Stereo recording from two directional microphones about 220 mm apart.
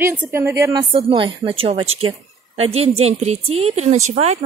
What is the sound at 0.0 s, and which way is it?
Speech, 10° right (ahead or behind).